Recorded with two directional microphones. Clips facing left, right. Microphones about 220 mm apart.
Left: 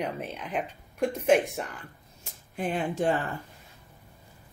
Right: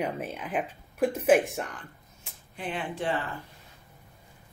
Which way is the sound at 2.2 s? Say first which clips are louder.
Left 6 dB; 45° left (ahead or behind).